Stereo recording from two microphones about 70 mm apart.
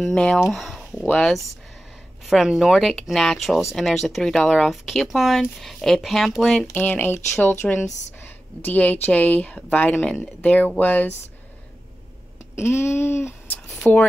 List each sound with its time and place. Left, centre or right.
0.1 s speech: centre
0.4 s speech: centre
6.7 s speech: left
7.6 s speech: centre
8.6 s speech: left
12.5 s a sound: left
13.9 s speech: left